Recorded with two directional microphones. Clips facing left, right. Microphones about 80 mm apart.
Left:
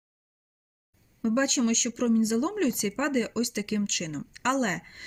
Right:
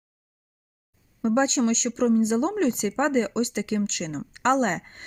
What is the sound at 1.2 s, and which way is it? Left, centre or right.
Speech, right.